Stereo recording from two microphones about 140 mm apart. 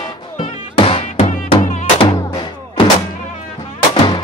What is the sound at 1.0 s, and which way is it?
Music, 60° left (ahead or behind).